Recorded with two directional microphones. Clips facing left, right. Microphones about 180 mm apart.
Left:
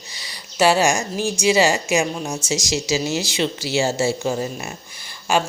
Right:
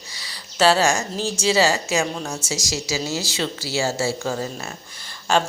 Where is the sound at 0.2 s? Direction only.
15° left (ahead or behind).